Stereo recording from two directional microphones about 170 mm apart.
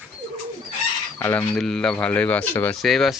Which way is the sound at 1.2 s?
10° left (ahead or behind).